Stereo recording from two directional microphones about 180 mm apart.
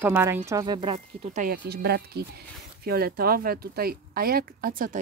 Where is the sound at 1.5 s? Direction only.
60° right (ahead or behind).